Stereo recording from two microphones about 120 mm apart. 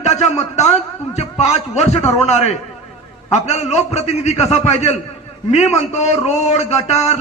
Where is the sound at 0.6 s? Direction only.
65° left (ahead or behind).